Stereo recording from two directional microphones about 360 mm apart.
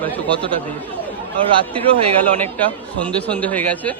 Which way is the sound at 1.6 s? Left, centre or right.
Centre.